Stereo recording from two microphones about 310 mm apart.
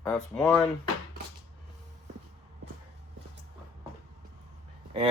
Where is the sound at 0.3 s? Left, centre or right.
Centre.